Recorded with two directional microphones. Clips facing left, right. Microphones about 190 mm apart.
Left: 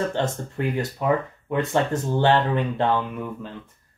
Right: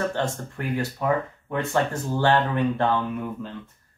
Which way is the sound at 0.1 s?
20° left (ahead or behind).